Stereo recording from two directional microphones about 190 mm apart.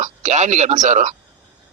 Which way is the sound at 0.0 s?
40° right (ahead or behind).